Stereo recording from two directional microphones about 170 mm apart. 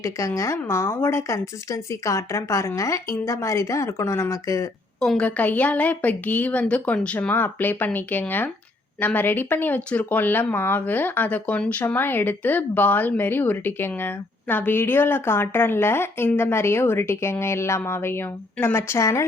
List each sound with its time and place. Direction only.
0.0 s speech: 20° left (ahead or behind)
4.9 s speech: 5° left (ahead or behind)